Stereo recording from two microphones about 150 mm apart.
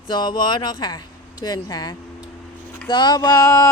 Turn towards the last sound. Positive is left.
turn(degrees=20)  # may be behind; listen again after turning